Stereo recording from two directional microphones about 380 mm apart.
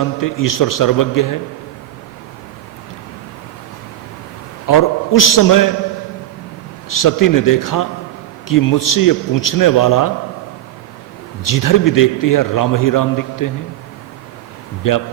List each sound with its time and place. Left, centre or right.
0.0 s a man's voice: left
4.6 s a man's voice: left
6.9 s a man's voice: left
11.4 s a man's voice: left
14.8 s a man's voice: left